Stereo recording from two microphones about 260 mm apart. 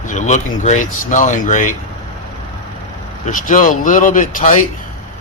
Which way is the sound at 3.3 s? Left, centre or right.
Left.